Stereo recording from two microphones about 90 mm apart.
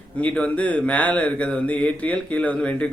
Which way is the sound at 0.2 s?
15° left (ahead or behind).